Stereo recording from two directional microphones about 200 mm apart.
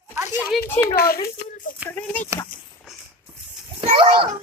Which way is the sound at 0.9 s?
50° left (ahead or behind).